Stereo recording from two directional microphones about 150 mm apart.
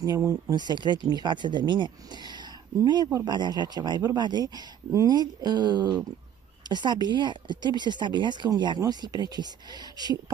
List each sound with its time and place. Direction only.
0.0 s speech: 20° right (ahead or behind)